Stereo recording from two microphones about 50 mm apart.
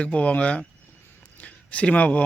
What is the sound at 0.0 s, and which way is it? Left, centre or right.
Speech, left.